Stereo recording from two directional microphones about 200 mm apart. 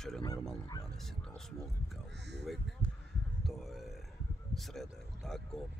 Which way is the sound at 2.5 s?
Centre (ahead or behind).